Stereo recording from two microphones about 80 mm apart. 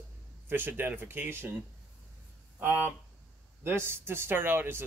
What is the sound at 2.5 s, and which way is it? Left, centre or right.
Speech, right.